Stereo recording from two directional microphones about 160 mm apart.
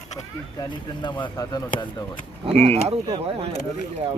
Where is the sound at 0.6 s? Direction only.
30° left (ahead or behind).